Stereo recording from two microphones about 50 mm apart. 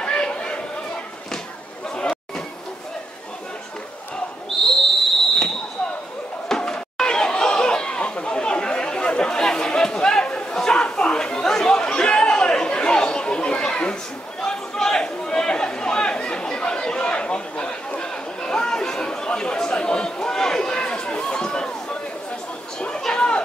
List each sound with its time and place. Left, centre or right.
0.0 s chatter: centre
1.9 s chatter: centre
6.5 s a sound: centre
7.0 s chatter: centre
14.4 s a sound: centre
22.8 s chatter: centre